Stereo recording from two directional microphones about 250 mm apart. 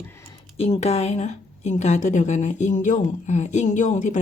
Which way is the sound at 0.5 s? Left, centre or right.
Left.